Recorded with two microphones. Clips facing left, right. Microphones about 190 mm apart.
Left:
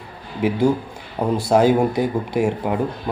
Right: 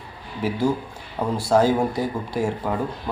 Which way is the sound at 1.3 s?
20° left (ahead or behind).